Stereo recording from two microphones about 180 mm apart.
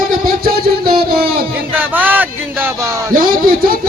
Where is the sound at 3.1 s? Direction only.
50° right (ahead or behind).